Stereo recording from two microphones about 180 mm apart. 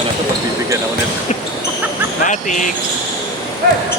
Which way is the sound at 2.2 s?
45° left (ahead or behind).